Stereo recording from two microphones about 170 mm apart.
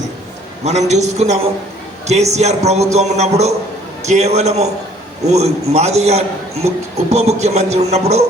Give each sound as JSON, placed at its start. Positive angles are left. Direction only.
{"t": 0.6, "sound": "a man's voice", "side_deg": -40}